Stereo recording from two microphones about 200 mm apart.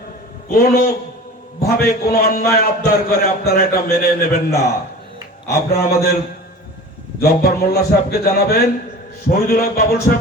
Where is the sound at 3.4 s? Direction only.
50° left (ahead or behind).